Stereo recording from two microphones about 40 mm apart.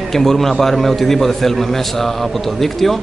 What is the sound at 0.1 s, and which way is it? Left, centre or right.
A man's voice, centre.